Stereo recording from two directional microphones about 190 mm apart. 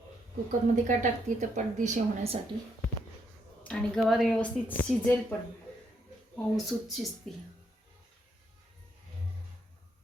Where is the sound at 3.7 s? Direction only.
Centre (ahead or behind).